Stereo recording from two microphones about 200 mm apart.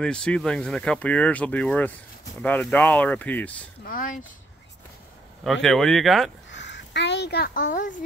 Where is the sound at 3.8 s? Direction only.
45° left (ahead or behind).